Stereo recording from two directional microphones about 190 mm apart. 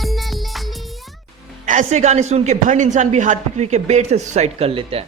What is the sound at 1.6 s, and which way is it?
A man's voice, 40° right (ahead or behind).